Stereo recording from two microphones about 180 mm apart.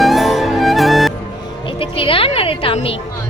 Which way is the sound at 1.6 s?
30° left (ahead or behind).